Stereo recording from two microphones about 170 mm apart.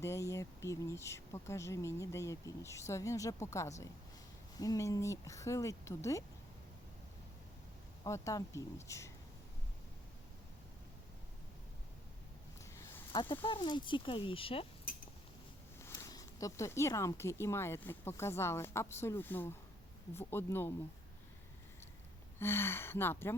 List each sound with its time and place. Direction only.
0.0 s speech: 15° left (ahead or behind)
8.0 s speech: 20° left (ahead or behind)
13.1 s speech: 30° left (ahead or behind)
15.8 s speech: 20° left (ahead or behind)
22.4 s speech: 15° left (ahead or behind)